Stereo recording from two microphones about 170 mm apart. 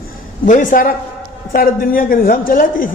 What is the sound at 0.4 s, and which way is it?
A man's voice, 50° left (ahead or behind).